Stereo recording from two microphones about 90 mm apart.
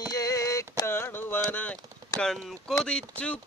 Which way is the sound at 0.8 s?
25° left (ahead or behind).